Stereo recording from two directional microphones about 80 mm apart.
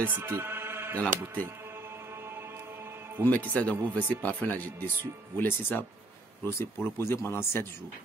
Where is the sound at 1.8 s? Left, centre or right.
Right.